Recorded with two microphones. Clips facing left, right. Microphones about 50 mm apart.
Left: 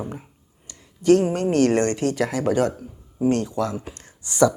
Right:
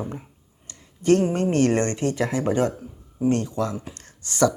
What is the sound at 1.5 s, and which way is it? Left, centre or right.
Speech, centre.